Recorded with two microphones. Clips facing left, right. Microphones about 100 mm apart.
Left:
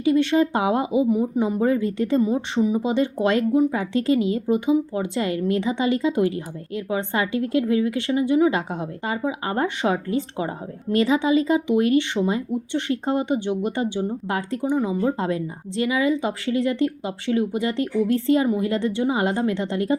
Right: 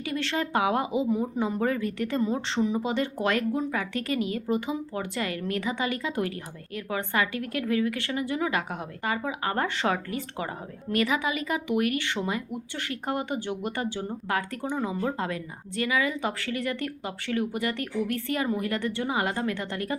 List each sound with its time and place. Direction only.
0.0 s a woman's voice: 20° left (ahead or behind)